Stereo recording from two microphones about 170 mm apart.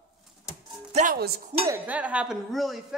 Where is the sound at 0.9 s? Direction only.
55° right (ahead or behind).